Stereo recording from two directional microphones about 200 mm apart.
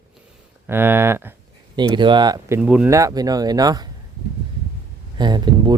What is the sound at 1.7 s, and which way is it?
Speech, 25° right (ahead or behind).